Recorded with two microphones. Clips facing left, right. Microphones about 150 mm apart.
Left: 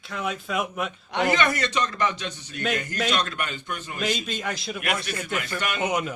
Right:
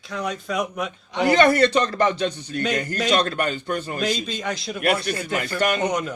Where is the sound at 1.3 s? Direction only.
35° right (ahead or behind).